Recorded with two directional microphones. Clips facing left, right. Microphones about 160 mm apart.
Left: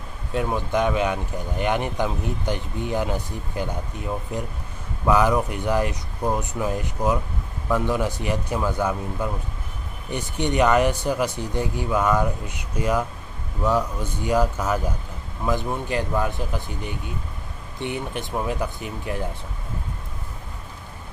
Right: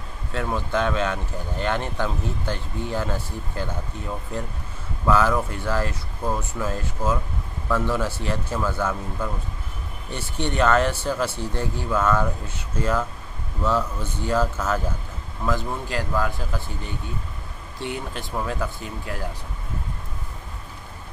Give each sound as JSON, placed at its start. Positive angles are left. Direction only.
{"t": 0.3, "sound": "speech", "side_deg": 15}